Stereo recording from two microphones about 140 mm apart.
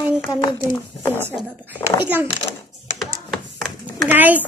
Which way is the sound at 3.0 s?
Centre (ahead or behind).